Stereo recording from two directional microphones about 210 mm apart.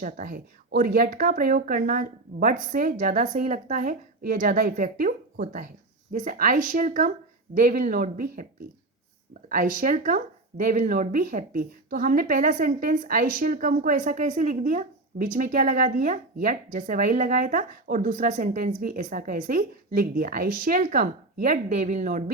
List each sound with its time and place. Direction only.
0.0 s speech: 40° right (ahead or behind)
9.5 s speech: 40° right (ahead or behind)